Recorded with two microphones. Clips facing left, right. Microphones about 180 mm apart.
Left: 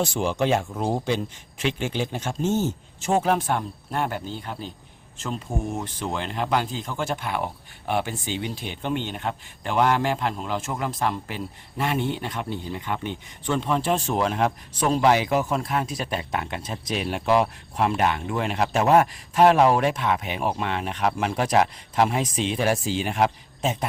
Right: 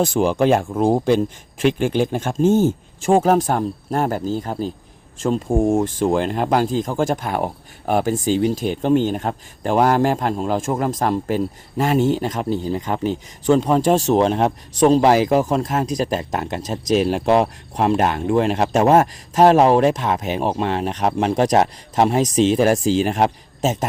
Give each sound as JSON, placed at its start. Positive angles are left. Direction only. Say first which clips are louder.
{"t": 0.0, "sound": "speech", "louder": "right 7 dB", "side_deg": -50}
{"t": 14.1, "sound": "speech", "louder": "right 7 dB", "side_deg": -30}